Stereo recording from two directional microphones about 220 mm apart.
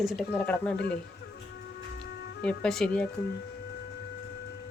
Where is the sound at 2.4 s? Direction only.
5° left (ahead or behind).